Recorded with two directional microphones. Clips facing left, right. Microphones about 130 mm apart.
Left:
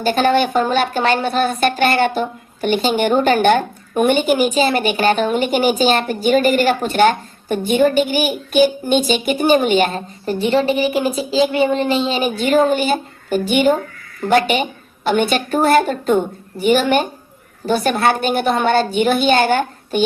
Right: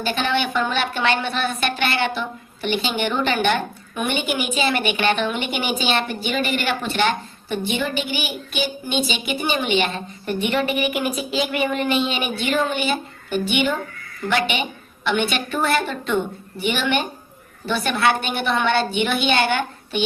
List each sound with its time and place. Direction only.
0.0 s a woman's voice: 45° left (ahead or behind)